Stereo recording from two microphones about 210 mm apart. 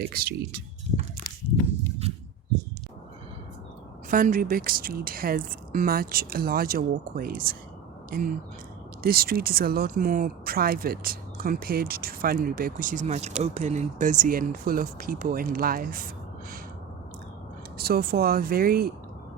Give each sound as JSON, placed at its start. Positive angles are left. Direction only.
{"t": 0.1, "sound": "speech", "side_deg": -45}
{"t": 2.0, "sound": "a sound", "side_deg": -30}
{"t": 4.1, "sound": "speech", "side_deg": -40}
{"t": 9.0, "sound": "speech", "side_deg": -45}
{"t": 17.7, "sound": "speech", "side_deg": -45}